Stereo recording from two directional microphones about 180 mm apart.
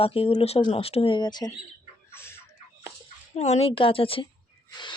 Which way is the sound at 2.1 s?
15° left (ahead or behind).